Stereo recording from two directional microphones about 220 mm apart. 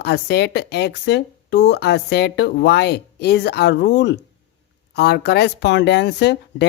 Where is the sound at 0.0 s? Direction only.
45° left (ahead or behind).